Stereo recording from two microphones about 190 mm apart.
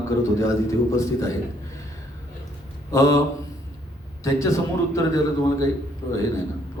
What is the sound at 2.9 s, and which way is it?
Mantra, 15° left (ahead or behind).